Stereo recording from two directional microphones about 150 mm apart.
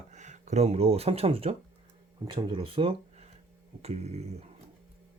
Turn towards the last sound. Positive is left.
turn(degrees=-45)  # may be behind; listen again after turning